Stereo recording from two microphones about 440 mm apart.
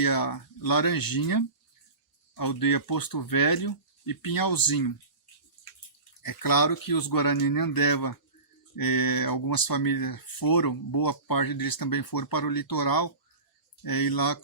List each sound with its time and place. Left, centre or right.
0.0 s speech: left
6.2 s speech: left